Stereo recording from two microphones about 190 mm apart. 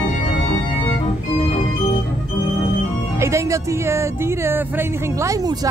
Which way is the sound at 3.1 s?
15° right (ahead or behind).